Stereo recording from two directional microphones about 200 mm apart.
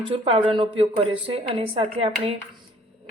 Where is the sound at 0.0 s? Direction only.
25° right (ahead or behind).